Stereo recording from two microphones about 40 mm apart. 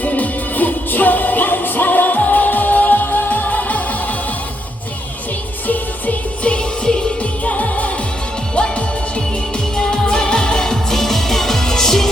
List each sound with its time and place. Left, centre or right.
0.0 s music: left
6.4 s music: left
7.2 s music: left; by 12.1 s centre